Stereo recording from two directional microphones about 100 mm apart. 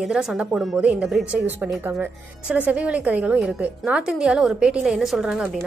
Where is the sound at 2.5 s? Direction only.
10° right (ahead or behind).